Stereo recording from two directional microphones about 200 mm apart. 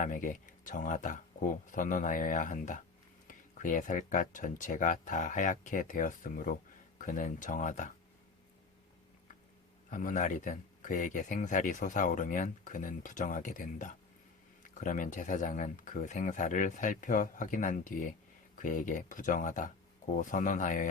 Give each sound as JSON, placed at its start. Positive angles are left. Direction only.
{"t": 0.0, "sound": "speech", "side_deg": 40}
{"t": 9.9, "sound": "speech", "side_deg": 40}